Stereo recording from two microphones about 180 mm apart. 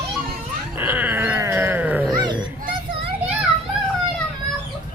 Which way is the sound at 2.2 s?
25° right (ahead or behind).